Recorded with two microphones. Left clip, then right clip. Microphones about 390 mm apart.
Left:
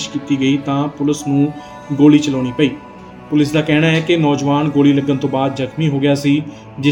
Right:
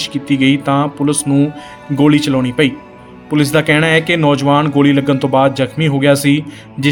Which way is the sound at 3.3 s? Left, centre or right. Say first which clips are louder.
Right 3 dB; right.